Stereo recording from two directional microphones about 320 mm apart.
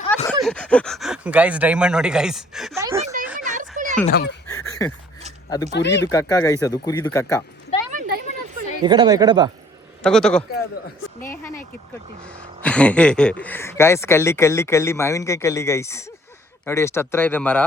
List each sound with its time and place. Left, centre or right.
0.1 s a sound: centre
0.4 s speech: centre
3.4 s a sound: right
4.0 s speech: left
4.8 s speech: centre
5.7 s speech: left
6.1 s speech: centre
7.9 s a sound: right
8.8 s a woman's voice: centre
10.0 s speech: centre
12.6 s speech: centre